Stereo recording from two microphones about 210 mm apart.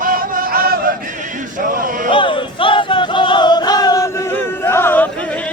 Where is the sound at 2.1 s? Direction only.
25° left (ahead or behind).